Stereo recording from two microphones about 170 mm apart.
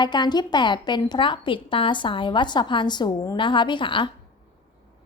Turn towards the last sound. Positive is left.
turn(degrees=30)  # may be behind; listen again after turning